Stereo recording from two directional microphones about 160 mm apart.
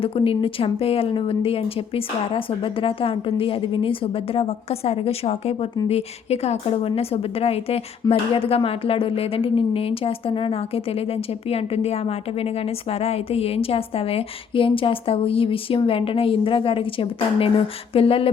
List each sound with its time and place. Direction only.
0.0 s a woman's voice: 35° left (ahead or behind)
8.0 s speech: 20° left (ahead or behind)
8.4 s a woman's voice: 35° left (ahead or behind)